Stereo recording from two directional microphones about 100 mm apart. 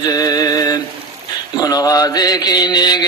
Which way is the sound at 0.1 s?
40° left (ahead or behind).